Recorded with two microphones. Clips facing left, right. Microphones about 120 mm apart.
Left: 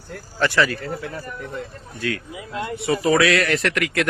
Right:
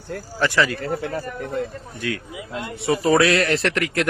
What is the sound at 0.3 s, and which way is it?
Speech, 15° right (ahead or behind).